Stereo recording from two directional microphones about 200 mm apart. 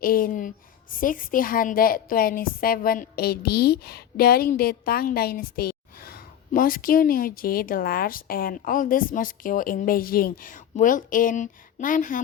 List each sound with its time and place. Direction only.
0.0 s a woman's voice: 45° left (ahead or behind)